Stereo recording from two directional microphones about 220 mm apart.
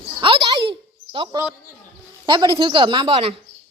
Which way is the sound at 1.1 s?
25° right (ahead or behind).